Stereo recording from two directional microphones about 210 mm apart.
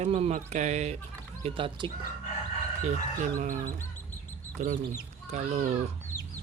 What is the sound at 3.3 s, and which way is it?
Speech, 40° right (ahead or behind).